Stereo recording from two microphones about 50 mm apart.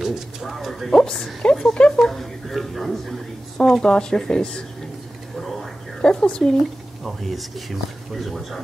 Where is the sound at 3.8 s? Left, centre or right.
Centre.